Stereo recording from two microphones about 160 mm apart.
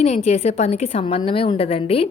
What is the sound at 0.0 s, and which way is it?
A woman's voice, 40° left (ahead or behind).